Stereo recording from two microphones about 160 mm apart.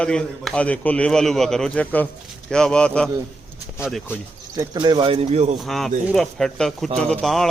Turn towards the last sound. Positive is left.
turn(degrees=0)  # may be behind; listen again after turning